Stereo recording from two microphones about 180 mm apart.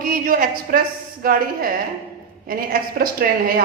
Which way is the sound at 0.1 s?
50° right (ahead or behind).